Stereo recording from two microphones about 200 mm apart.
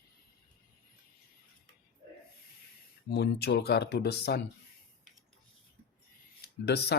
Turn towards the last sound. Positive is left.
turn(degrees=55)  # may be behind; listen again after turning